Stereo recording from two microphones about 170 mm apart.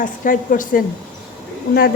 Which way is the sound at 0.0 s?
50° left (ahead or behind).